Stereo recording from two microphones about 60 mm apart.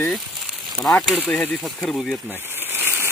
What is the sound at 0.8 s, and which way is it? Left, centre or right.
Speech, left.